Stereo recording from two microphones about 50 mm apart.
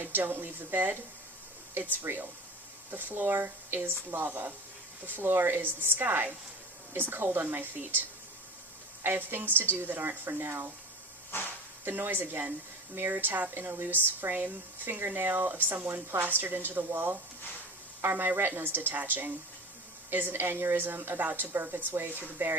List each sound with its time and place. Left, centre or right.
0.0 s speech: right
2.0 s speech: right
9.0 s speech: right
11.3 s speech: left
11.9 s speech: right